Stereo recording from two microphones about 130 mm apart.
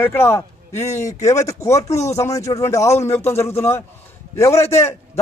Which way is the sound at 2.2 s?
25° left (ahead or behind).